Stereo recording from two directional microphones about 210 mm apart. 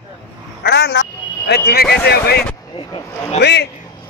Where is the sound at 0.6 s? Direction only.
55° left (ahead or behind).